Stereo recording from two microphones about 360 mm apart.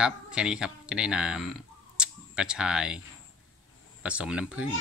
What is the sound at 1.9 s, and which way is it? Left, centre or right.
Camera, centre.